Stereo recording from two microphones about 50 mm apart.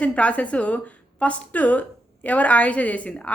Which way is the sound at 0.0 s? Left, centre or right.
Left.